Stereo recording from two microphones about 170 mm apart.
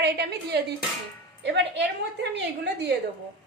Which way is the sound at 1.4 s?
90° right.